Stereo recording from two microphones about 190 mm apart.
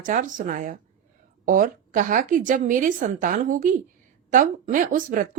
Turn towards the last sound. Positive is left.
turn(degrees=-45)  # may be behind; listen again after turning